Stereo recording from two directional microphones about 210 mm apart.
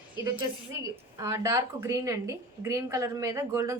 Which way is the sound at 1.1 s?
15° right (ahead or behind).